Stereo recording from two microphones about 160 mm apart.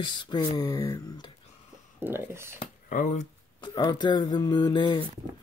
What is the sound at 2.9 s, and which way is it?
Speech, 55° left (ahead or behind).